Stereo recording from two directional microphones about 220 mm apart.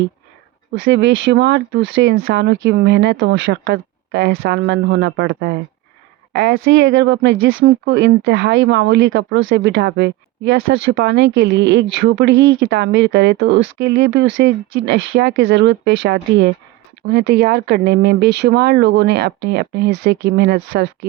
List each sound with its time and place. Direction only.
0.7 s speech: 55° right (ahead or behind)